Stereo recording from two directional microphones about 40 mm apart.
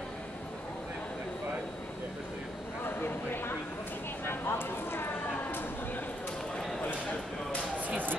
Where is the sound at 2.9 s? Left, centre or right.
Left.